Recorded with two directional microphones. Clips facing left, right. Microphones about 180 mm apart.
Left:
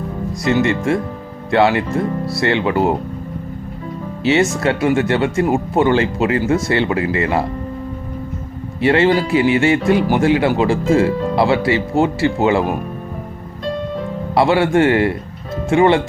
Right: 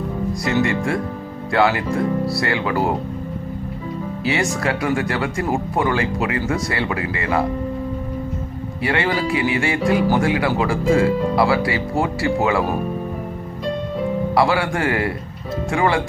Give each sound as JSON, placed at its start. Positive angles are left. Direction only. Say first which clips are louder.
{"t": 0.4, "sound": "speech", "louder": "left 5 dB", "side_deg": 20}
{"t": 4.2, "sound": "speech", "louder": "left 7 dB", "side_deg": 25}
{"t": 8.8, "sound": "speech", "louder": "left 7 dB", "side_deg": 25}
{"t": 14.3, "sound": "speech", "louder": "left 7 dB", "side_deg": 25}